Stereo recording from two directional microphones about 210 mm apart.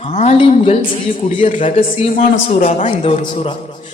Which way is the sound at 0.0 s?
30° left (ahead or behind).